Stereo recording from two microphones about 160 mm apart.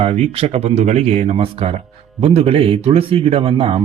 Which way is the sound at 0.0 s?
40° right (ahead or behind).